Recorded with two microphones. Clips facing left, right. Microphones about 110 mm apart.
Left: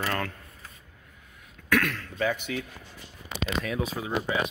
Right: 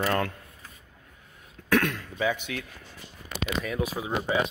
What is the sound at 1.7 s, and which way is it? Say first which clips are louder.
Throat clearing: right 2 dB; 25° right (ahead or behind).